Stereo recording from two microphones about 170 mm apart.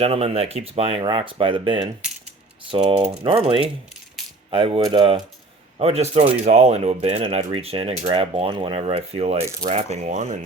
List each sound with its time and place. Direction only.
0.0 s speech: 35° right (ahead or behind)